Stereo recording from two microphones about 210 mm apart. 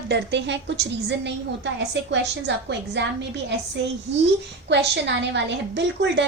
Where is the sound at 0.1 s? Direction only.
55° right (ahead or behind).